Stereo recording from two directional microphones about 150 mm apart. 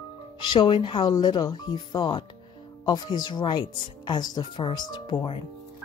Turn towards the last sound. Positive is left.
turn(degrees=30)  # may be behind; listen again after turning